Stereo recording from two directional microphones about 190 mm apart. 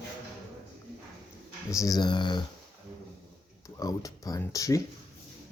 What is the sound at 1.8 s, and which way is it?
Speech, 20° left (ahead or behind).